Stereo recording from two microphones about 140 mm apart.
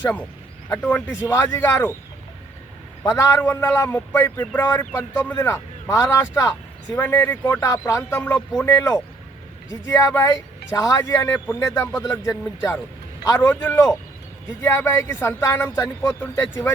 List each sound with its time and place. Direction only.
0.0 s speech: 10° left (ahead or behind)
3.0 s speech: 20° left (ahead or behind)
4.6 s speech: 25° left (ahead or behind)
4.9 s speech: 10° left (ahead or behind)
9.8 s speech: 20° left (ahead or behind)